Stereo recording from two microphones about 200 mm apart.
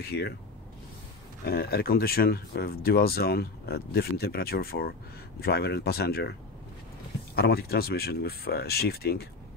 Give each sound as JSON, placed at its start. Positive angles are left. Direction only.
{"t": 0.0, "sound": "speech", "side_deg": 55}
{"t": 1.4, "sound": "speech", "side_deg": 50}
{"t": 7.3, "sound": "speech", "side_deg": 50}